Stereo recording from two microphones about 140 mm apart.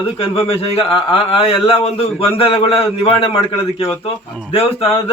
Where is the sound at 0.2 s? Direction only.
45° left (ahead or behind).